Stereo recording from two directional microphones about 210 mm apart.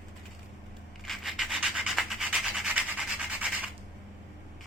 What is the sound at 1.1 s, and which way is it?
Rub, centre (ahead or behind).